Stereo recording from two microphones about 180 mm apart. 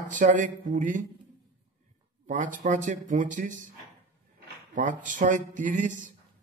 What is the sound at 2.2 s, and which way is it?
Speech, 45° right (ahead or behind).